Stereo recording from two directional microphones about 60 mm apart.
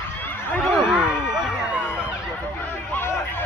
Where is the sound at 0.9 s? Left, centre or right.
Centre.